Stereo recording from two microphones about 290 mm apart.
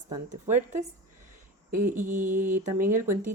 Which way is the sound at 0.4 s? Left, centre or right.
Right.